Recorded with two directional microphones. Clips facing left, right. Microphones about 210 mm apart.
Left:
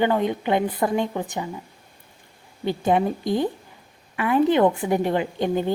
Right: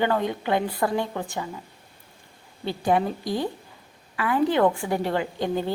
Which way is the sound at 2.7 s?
20° left (ahead or behind).